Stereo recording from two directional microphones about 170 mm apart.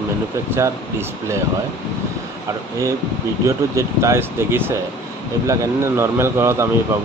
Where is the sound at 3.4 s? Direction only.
15° right (ahead or behind).